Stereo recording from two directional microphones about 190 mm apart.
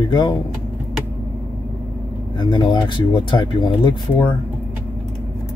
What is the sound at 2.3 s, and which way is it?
Speech, 25° left (ahead or behind).